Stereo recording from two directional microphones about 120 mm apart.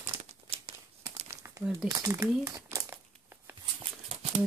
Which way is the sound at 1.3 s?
25° right (ahead or behind).